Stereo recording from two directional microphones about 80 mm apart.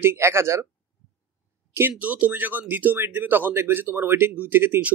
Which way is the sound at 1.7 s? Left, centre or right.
Right.